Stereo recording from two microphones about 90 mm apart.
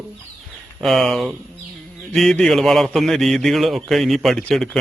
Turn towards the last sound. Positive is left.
turn(degrees=5)  # may be behind; listen again after turning